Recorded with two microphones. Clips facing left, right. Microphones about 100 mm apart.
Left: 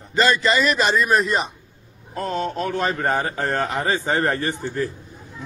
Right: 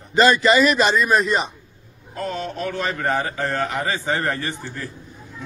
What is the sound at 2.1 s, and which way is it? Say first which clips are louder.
A man's voice: left 3 dB; 40° left (ahead or behind).